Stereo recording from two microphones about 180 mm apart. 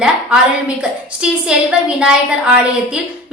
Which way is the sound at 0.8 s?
5° right (ahead or behind).